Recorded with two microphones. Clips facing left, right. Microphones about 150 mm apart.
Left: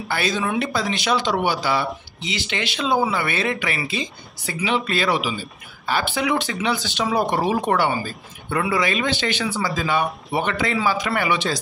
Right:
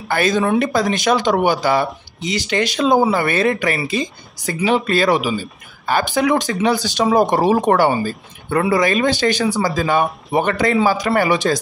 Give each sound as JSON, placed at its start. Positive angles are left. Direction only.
{"t": 0.1, "sound": "speech", "side_deg": -50}